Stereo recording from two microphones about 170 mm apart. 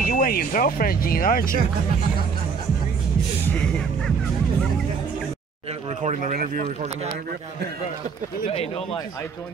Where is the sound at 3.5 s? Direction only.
5° left (ahead or behind).